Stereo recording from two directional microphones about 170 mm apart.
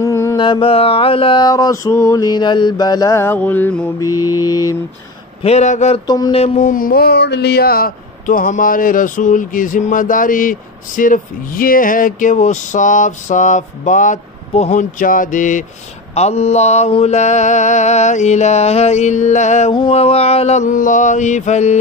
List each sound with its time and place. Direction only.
0.0 s music: 15° left (ahead or behind)
0.4 s mantra: 30° left (ahead or behind); by 3.9 s 10° left (ahead or behind)
4.2 s mantra: 20° left (ahead or behind)
5.4 s mantra: 40° left (ahead or behind)
6.0 s mantra: 25° left (ahead or behind)
6.3 s mantra: 40° left (ahead or behind)
6.7 s speech: 60° left (ahead or behind)
16.2 s mantra: 40° left (ahead or behind)
19.7 s mantra: 30° left (ahead or behind)